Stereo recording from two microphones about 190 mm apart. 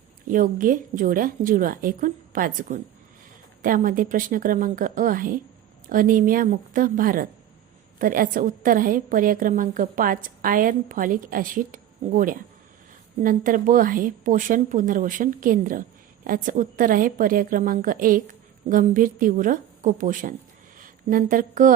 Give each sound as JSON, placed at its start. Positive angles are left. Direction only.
{"t": 0.3, "sound": "a woman's voice", "side_deg": -45}